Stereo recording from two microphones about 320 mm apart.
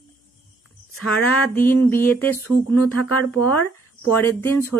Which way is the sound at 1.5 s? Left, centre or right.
Centre.